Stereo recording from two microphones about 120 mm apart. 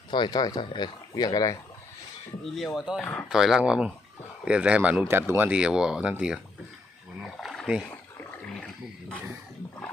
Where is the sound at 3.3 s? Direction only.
5° right (ahead or behind).